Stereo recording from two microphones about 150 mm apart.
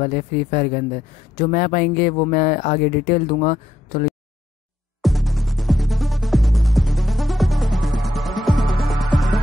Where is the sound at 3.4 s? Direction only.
55° left (ahead or behind).